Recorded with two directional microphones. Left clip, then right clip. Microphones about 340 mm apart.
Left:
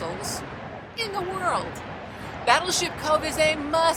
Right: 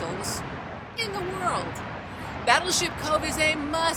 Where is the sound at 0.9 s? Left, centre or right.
Centre.